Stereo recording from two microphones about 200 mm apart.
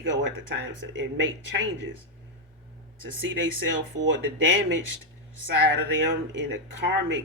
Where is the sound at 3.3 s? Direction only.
65° right (ahead or behind).